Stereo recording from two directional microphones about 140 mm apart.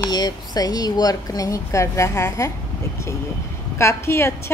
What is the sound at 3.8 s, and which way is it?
Speech, 20° left (ahead or behind).